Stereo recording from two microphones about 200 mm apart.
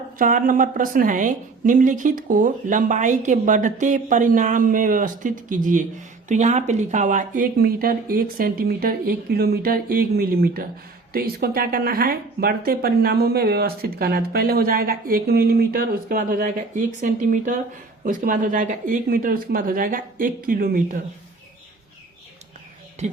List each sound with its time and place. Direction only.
0.2 s a woman's voice: 45° right (ahead or behind)